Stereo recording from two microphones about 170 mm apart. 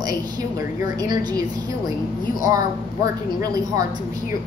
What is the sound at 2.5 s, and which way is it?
Speech, 15° right (ahead or behind).